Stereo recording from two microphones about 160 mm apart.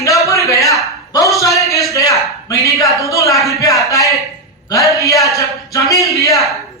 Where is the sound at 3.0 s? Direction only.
20° left (ahead or behind).